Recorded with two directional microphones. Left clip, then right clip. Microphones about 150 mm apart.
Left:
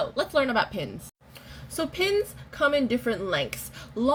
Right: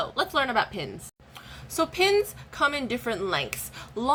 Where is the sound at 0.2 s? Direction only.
25° right (ahead or behind).